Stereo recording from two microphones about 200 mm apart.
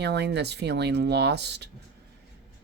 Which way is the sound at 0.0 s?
55° right (ahead or behind).